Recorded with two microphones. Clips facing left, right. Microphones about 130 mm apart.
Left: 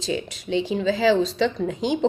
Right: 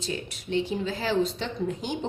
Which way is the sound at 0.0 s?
90° left.